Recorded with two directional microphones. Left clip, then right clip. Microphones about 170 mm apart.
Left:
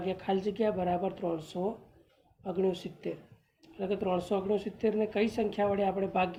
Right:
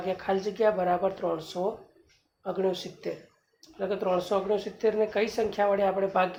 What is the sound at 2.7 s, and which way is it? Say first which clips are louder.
Speech: right 3 dB; 30° left (ahead or behind).